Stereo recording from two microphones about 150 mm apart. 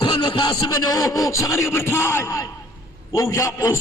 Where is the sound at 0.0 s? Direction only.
30° left (ahead or behind).